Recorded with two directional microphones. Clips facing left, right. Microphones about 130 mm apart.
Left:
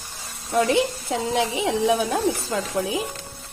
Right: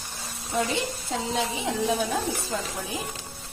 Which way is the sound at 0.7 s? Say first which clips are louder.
Left 8 dB; 70° left (ahead or behind).